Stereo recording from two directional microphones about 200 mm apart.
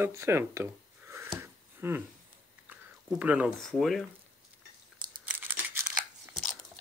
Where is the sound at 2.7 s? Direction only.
5° right (ahead or behind).